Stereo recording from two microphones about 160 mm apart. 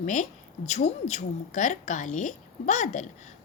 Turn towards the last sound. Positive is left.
turn(degrees=50)  # may be behind; listen again after turning